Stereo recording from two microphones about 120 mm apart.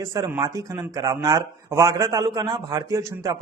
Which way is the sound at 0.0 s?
25° right (ahead or behind).